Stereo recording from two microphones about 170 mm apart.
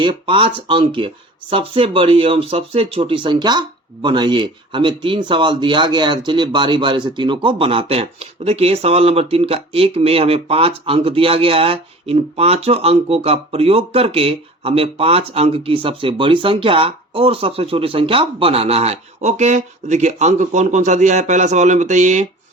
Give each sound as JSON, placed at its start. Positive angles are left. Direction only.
{"t": 0.0, "sound": "speech", "side_deg": -30}